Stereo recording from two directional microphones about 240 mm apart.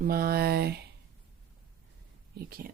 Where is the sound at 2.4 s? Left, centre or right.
Right.